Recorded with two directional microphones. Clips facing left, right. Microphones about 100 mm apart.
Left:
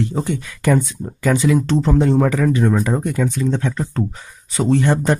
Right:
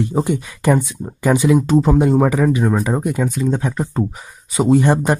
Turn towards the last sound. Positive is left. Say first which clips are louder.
# right 2 dB
turn(degrees=-20)  # may be behind; listen again after turning